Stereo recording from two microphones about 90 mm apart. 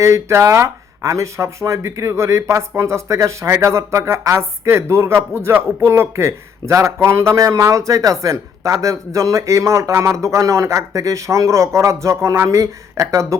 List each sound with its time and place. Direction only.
0.0 s speech: 35° right (ahead or behind)